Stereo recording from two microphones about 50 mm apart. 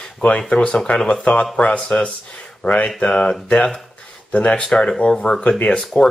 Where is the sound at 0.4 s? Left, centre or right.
Centre.